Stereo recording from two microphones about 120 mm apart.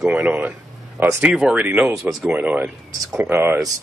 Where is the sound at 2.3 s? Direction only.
15° right (ahead or behind).